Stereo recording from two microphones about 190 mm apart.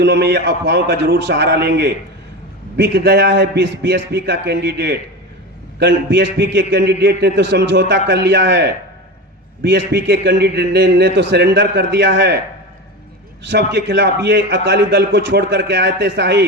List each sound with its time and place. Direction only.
0.0 s a man's voice: 60° right (ahead or behind)
13.5 s a man's voice: 65° right (ahead or behind)